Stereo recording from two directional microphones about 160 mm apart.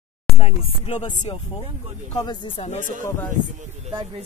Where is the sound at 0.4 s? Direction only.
40° left (ahead or behind).